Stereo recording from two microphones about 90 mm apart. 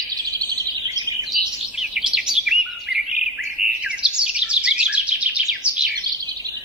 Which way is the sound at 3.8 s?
15° right (ahead or behind).